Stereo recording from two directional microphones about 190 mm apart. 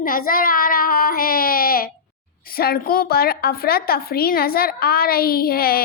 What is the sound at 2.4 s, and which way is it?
A woman's voice, 50° left (ahead or behind).